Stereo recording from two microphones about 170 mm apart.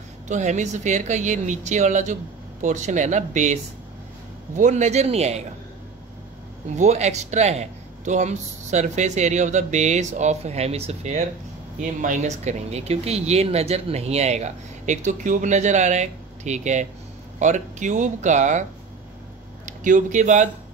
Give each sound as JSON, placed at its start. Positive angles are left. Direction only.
{"t": 0.3, "sound": "a man's voice", "side_deg": -45}
{"t": 4.6, "sound": "speech", "side_deg": -45}
{"t": 6.8, "sound": "a man's voice", "side_deg": -40}
{"t": 19.8, "sound": "a man's voice", "side_deg": -50}